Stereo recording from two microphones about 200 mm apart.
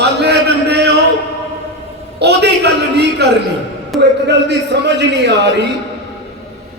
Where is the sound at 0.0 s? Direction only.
55° right (ahead or behind).